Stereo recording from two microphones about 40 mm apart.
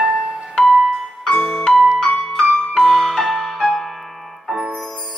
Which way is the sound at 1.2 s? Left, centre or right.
Centre.